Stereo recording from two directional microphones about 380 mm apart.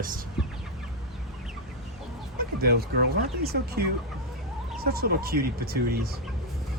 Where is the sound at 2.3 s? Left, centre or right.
Right.